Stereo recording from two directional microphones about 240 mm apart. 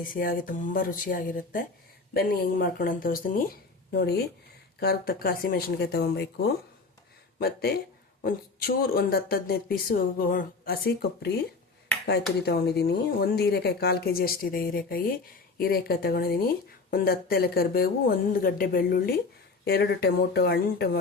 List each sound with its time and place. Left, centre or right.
0.0 s speech: left
7.3 s speech: left
12.5 s speech: left